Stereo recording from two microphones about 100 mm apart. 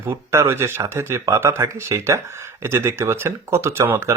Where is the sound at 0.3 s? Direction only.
25° right (ahead or behind).